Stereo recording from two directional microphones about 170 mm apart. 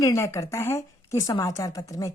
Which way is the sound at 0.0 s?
15° left (ahead or behind).